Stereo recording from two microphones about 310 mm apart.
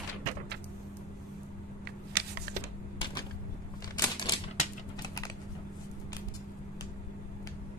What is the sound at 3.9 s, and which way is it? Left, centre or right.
Typewriter, centre.